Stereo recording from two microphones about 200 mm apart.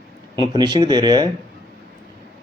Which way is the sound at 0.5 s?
20° right (ahead or behind).